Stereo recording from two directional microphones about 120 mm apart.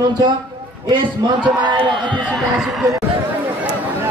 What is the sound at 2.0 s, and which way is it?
Speech, 10° left (ahead or behind).